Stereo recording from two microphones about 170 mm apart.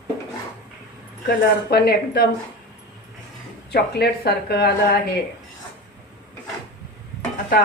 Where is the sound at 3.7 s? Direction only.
70° left (ahead or behind).